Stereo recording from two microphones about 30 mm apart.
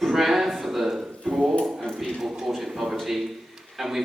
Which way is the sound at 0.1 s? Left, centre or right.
Centre.